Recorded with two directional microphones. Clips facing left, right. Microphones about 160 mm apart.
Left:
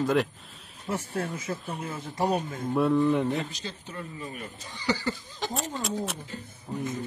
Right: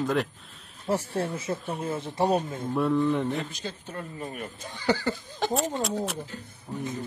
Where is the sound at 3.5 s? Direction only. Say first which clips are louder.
Right 2 dB; 50° right (ahead or behind).